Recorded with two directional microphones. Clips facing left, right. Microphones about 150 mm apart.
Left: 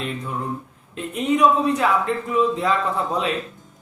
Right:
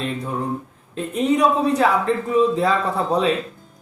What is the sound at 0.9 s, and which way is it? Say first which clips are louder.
Speech: right 2 dB; 35° right (ahead or behind).